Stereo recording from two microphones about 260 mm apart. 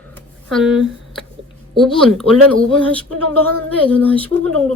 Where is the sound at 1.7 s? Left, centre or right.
Centre.